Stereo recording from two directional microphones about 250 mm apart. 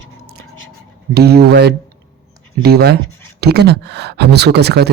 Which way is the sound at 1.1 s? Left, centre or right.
Right.